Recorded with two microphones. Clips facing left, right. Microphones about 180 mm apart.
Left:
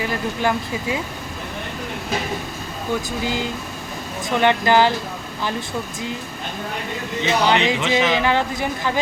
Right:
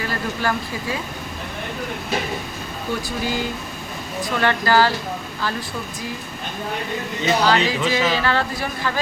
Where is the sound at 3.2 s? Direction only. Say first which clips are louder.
Even; 20° left (ahead or behind).